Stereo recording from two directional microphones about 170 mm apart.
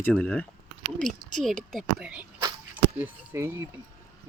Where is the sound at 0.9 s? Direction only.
45° right (ahead or behind).